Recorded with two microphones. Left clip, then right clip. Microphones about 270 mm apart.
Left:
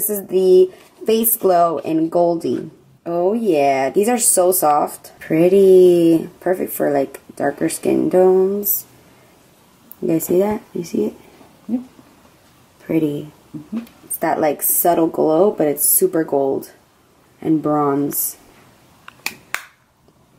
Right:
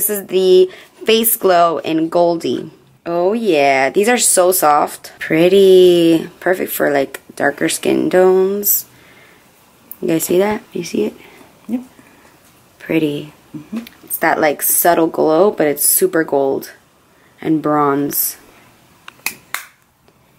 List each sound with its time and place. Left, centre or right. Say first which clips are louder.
0.2 s speech: right 1 dB; centre
10.0 s speech: right 2 dB; centre
13.7 s speech: right 3 dB; centre
16.3 s speech: right 2 dB; centre
19.0 s finger snapping: right 2 dB; centre